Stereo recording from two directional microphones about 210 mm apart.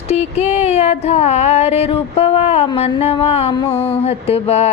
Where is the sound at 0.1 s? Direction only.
30° left (ahead or behind).